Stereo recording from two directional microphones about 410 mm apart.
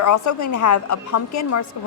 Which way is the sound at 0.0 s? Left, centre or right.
Left.